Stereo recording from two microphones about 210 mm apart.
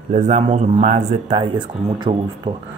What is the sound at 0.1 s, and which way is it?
Speech, 30° right (ahead or behind).